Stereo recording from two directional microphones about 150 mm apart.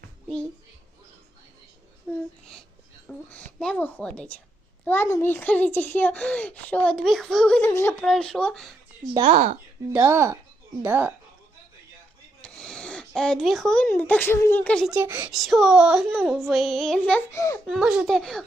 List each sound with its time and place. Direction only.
3.1 s a woman's voice: 10° left (ahead or behind)
8.0 s a child's voice: 5° left (ahead or behind)
9.2 s speech: 50° right (ahead or behind)
9.9 s speech: 15° right (ahead or behind)
12.4 s speech: 5° left (ahead or behind)
14.8 s speech: 10° right (ahead or behind)
15.4 s a child's voice: centre (ahead or behind)
17.3 s a child's voice: 20° left (ahead or behind)
17.7 s a child's voice: 5° right (ahead or behind)